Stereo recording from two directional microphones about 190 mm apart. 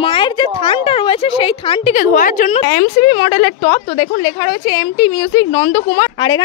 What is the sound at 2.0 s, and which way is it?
Speech, 45° left (ahead or behind).